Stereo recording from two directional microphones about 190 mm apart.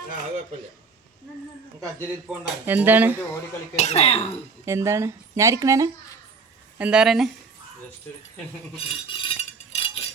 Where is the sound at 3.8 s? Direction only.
35° left (ahead or behind).